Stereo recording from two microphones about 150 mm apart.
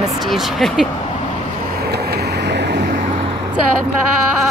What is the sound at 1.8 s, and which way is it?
Vehicle, 90° right.